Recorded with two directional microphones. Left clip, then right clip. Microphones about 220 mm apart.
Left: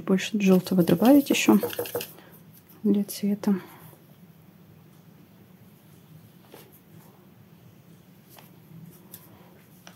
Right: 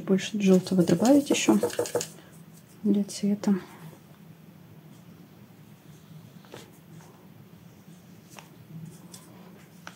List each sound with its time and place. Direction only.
0.0 s a woman's voice: 35° left (ahead or behind); by 3.6 s 15° left (ahead or behind)